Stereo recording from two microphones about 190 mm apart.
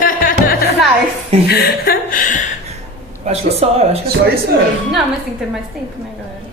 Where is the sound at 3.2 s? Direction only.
35° right (ahead or behind).